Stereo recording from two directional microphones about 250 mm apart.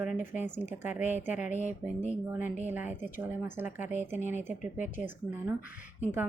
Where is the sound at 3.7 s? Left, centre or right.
Left.